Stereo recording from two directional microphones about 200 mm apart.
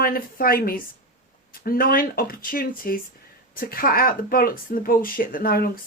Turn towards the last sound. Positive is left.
turn(degrees=45)  # may be behind; listen again after turning